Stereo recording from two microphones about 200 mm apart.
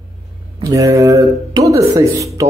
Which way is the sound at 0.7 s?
15° right (ahead or behind).